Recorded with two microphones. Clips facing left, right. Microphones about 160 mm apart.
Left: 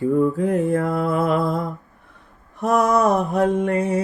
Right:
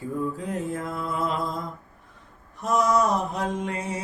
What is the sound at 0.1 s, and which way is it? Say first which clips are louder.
Mantra: left 9 dB; 60° left (ahead or behind).